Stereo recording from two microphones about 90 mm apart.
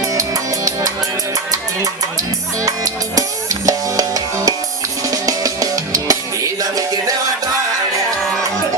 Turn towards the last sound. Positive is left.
turn(degrees=-40)  # may be behind; listen again after turning